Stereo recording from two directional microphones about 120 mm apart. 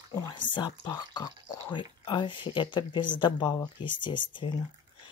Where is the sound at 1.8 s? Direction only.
45° left (ahead or behind).